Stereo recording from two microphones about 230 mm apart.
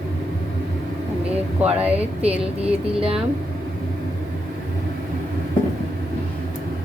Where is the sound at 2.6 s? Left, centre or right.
Right.